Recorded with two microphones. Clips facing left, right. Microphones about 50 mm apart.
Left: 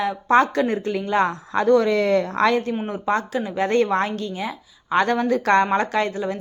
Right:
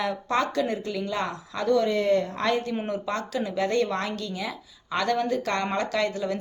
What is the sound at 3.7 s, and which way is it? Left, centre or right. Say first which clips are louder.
A woman's voice: left 6 dB; left.